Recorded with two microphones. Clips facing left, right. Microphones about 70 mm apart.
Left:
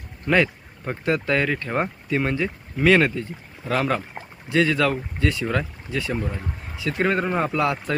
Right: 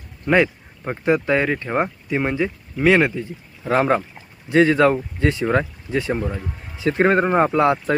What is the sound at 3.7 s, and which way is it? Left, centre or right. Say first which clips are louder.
Speech: right 5 dB; right.